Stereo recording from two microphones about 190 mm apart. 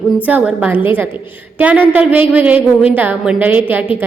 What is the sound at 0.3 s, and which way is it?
A woman's voice, 10° right (ahead or behind).